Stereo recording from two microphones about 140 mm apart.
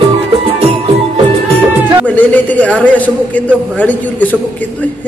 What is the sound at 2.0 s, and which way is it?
A man's voice, 10° left (ahead or behind).